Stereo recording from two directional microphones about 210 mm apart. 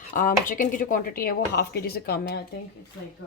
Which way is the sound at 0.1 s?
40° left (ahead or behind).